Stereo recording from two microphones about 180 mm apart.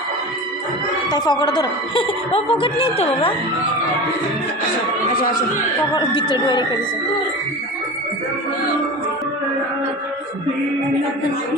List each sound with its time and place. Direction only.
1.1 s a woman's voice: 25° left (ahead or behind)
5.1 s speech: 50° left (ahead or behind)
5.9 s a woman's voice: 25° left (ahead or behind)